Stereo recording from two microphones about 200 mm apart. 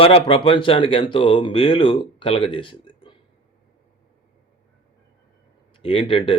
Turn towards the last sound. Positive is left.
turn(degrees=25)  # may be behind; listen again after turning